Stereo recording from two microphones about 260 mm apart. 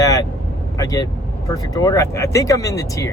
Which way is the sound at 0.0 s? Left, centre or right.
Centre.